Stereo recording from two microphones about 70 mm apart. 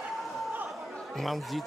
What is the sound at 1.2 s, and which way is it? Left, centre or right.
Speech, centre.